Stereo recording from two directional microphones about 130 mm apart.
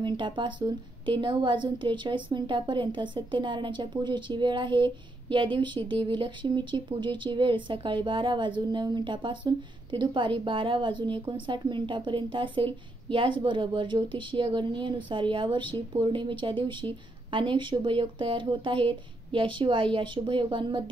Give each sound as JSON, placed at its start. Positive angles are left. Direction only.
{"t": 0.0, "sound": "a woman's voice", "side_deg": -35}